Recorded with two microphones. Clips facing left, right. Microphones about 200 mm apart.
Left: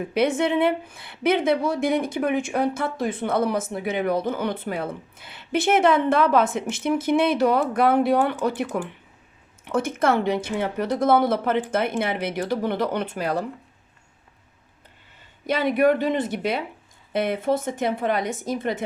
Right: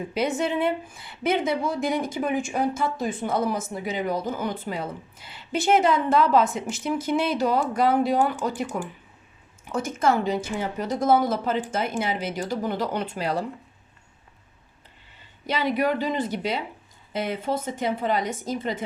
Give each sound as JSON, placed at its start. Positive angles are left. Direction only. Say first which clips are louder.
{"t": 0.1, "sound": "a woman's voice", "louder": "left 4 dB", "side_deg": 65}
{"t": 15.4, "sound": "a woman's voice", "louder": "left 5 dB", "side_deg": 55}